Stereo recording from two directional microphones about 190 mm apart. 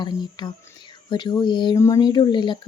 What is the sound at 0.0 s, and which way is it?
Speech, 20° left (ahead or behind).